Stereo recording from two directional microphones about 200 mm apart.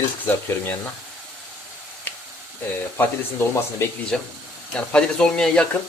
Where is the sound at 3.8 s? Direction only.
10° left (ahead or behind).